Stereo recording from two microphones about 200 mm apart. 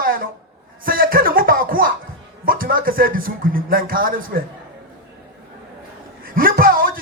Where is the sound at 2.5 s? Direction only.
45° right (ahead or behind).